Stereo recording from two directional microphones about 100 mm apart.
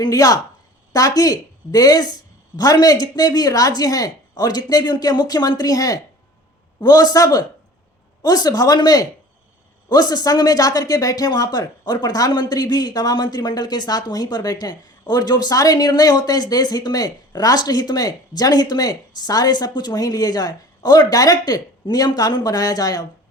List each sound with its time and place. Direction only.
0.0 s speech: 35° left (ahead or behind)